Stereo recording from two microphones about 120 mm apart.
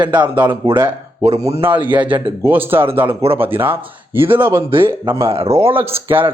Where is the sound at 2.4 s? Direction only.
20° right (ahead or behind).